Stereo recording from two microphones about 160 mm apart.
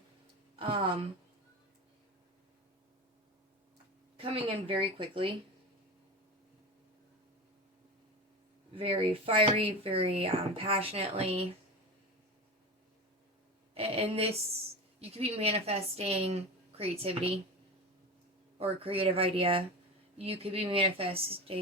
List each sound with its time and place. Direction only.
4.2 s speech: 35° right (ahead or behind)
8.7 s speech: 35° right (ahead or behind)
13.7 s speech: 40° right (ahead or behind)
18.5 s speech: 35° right (ahead or behind)